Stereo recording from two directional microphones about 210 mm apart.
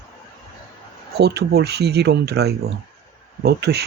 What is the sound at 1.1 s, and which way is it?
Speech, 50° right (ahead or behind).